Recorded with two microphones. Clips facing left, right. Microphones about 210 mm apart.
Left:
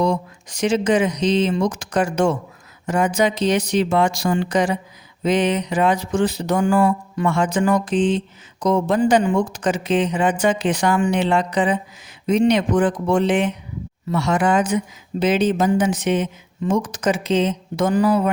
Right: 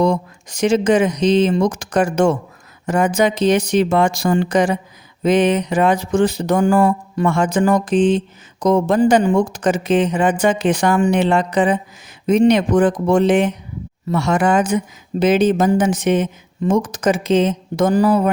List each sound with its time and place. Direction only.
0.0 s speech: 50° right (ahead or behind)